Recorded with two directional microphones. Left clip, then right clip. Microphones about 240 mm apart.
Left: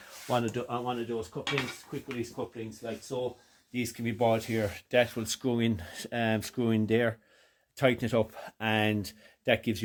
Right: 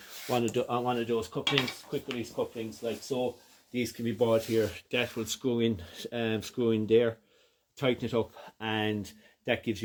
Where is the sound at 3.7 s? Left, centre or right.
Left.